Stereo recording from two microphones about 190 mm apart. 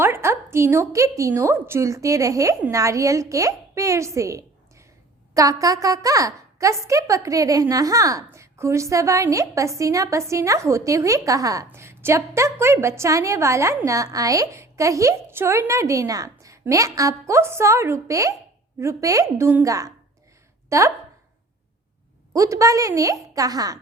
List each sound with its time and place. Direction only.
0.0 s a woman's voice: 15° right (ahead or behind)
22.3 s a woman's voice: 15° right (ahead or behind)